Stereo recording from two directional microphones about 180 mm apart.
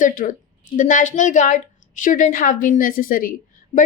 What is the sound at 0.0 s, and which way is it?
A woman's voice, 45° left (ahead or behind).